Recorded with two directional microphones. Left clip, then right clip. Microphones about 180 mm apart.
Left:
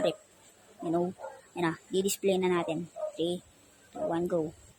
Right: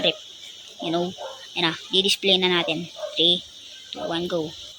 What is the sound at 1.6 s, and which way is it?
Speech, 10° left (ahead or behind).